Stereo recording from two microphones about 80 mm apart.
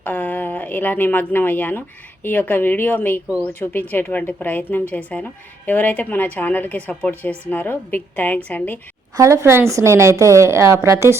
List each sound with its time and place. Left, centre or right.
0.0 s a woman's voice: left
9.1 s speech: right